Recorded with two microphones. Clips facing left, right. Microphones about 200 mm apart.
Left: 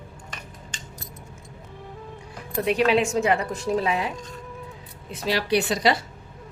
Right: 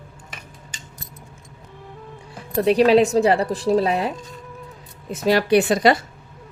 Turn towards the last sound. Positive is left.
turn(degrees=-55)  # may be behind; listen again after turning